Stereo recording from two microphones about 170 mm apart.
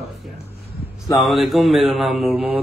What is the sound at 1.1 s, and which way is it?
Speech, centre (ahead or behind).